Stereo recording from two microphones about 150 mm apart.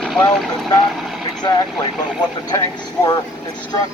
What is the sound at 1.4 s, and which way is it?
Speech, 25° left (ahead or behind).